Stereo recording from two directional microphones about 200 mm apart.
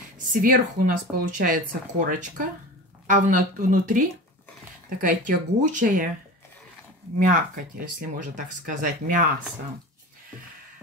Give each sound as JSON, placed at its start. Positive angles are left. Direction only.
{"t": 0.3, "sound": "speech", "side_deg": -45}
{"t": 7.2, "sound": "speech", "side_deg": -40}